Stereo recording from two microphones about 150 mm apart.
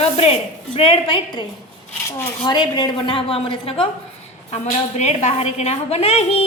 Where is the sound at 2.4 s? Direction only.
30° left (ahead or behind).